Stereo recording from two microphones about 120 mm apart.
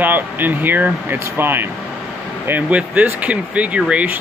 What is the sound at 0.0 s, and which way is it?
Speech, 15° right (ahead or behind).